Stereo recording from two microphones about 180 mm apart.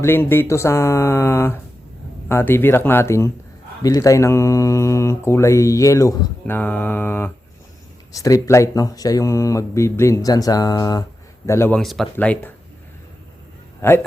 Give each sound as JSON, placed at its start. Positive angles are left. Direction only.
{"t": 0.0, "sound": "speech", "side_deg": 10}
{"t": 11.8, "sound": "speech", "side_deg": 0}
{"t": 13.8, "sound": "speech", "side_deg": 15}